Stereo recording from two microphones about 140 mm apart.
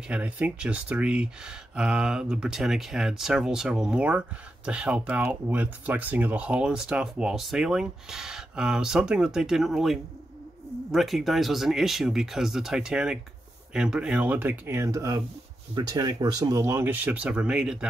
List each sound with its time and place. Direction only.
0.1 s speech: 10° right (ahead or behind)